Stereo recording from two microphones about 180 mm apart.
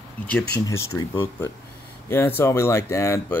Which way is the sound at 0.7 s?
15° left (ahead or behind).